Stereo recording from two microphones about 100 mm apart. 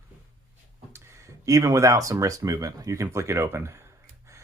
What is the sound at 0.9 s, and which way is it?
Speech, 30° right (ahead or behind).